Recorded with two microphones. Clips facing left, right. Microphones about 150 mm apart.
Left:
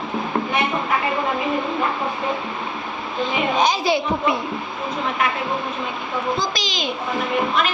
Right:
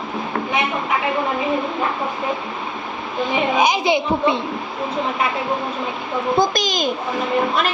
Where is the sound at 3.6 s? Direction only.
15° right (ahead or behind).